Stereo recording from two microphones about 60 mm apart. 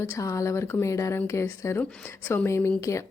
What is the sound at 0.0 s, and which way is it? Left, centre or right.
A woman's voice, left.